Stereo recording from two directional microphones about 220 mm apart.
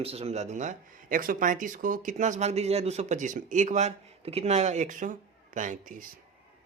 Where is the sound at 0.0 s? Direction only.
30° right (ahead or behind).